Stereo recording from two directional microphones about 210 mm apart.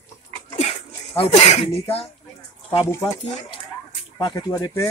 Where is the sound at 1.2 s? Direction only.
30° left (ahead or behind).